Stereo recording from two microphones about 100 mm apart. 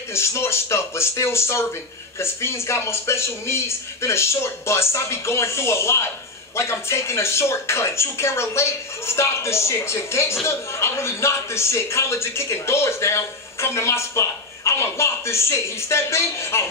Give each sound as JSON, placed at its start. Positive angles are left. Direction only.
{"t": 0.1, "sound": "a man's voice", "side_deg": 25}